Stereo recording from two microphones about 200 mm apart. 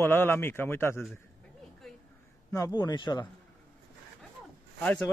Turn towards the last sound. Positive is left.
turn(degrees=5)  # may be behind; listen again after turning